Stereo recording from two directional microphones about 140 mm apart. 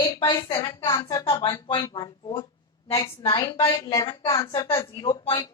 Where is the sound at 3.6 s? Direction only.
40° left (ahead or behind).